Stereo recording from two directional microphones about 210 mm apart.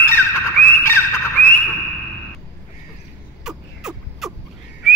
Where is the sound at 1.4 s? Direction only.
10° left (ahead or behind).